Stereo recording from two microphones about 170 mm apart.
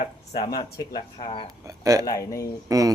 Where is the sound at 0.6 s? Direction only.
25° left (ahead or behind).